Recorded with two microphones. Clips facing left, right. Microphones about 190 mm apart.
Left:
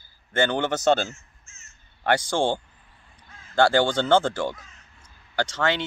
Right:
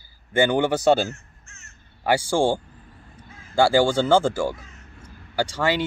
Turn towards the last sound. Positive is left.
turn(degrees=-10)  # may be behind; listen again after turning